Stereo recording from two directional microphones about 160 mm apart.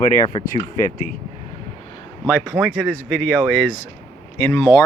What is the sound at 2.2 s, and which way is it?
Speech, 5° right (ahead or behind).